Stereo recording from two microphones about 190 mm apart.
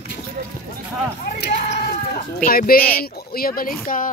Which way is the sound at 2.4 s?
50° left (ahead or behind).